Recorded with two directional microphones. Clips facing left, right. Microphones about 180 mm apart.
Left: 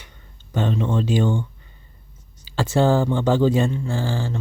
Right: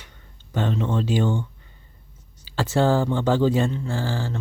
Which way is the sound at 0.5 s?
15° left (ahead or behind).